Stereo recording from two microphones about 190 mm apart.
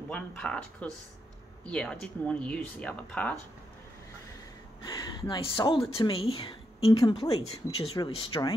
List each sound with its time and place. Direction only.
0.1 s speech: 5° left (ahead or behind)
5.3 s a woman's voice: 25° left (ahead or behind)